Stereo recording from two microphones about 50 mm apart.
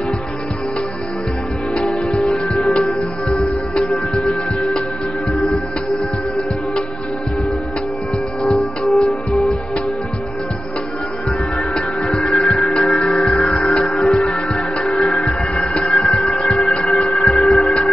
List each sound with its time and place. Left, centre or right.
2.0 s music: centre
3.3 s music: centre
3.9 s music: centre
8.5 s music: centre
11.7 s music: centre
13.6 s music: centre
13.8 s music: centre
14.3 s music: centre
14.9 s music: centre
17.2 s a sound: centre